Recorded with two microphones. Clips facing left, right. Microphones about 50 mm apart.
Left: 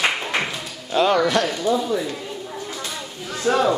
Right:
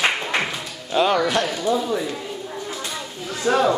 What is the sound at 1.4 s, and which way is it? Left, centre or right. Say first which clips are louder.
Speech: left 1 dB; centre.